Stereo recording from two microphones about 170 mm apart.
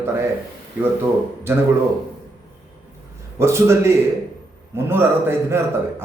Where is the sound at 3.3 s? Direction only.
15° right (ahead or behind).